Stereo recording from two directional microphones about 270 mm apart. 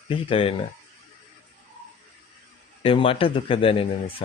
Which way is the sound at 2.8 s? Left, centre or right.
Centre.